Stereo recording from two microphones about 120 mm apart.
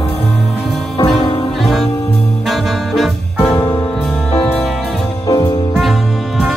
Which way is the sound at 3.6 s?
40° left (ahead or behind).